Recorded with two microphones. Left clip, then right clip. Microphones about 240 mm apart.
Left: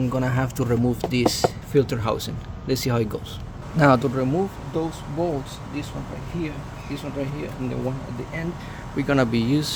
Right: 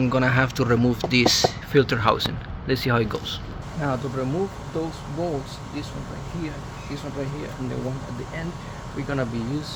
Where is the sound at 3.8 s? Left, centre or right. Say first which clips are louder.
Left 9 dB; left.